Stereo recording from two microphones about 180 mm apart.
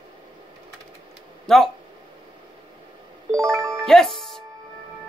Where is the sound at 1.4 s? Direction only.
Centre (ahead or behind).